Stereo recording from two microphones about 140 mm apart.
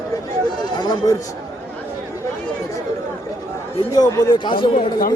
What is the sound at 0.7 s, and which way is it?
Speech, 30° left (ahead or behind).